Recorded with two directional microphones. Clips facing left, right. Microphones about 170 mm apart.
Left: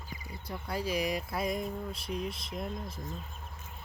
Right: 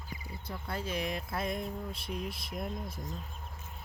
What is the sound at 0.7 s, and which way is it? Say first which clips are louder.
Speech: left 4 dB; 10° left (ahead or behind).